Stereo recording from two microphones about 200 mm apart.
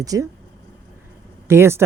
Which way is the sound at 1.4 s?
15° right (ahead or behind).